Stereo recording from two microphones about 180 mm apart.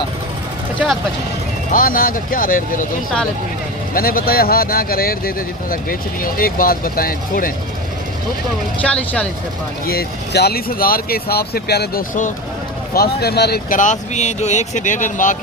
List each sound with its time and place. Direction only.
1.7 s speech: 50° left (ahead or behind)
3.9 s speech: 55° left (ahead or behind)
8.8 s speech: 5° left (ahead or behind)
9.8 s speech: 55° left (ahead or behind)